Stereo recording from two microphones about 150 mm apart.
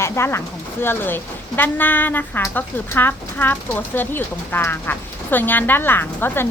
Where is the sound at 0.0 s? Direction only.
15° left (ahead or behind).